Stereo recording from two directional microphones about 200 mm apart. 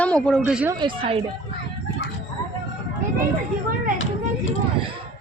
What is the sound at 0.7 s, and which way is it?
Speech, 25° right (ahead or behind).